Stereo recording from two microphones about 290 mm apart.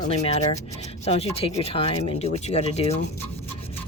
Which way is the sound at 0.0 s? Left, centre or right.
Left.